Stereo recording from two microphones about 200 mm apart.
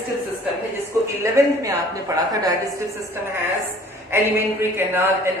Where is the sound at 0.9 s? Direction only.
15° right (ahead or behind).